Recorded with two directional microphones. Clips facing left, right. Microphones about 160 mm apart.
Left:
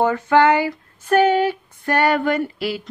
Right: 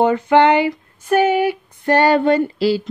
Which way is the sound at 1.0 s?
10° right (ahead or behind).